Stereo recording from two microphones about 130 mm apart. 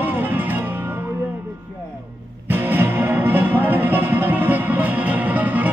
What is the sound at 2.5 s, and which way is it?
Music, 15° right (ahead or behind).